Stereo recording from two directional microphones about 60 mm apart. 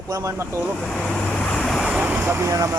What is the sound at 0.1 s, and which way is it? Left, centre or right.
Speech, right.